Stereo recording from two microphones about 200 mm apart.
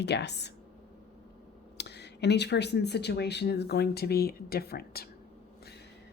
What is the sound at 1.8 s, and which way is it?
A woman's voice, 55° left (ahead or behind).